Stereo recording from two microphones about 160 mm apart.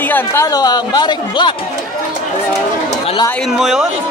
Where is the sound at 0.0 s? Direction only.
15° left (ahead or behind).